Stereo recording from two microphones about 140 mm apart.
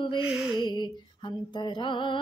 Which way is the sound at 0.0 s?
35° left (ahead or behind).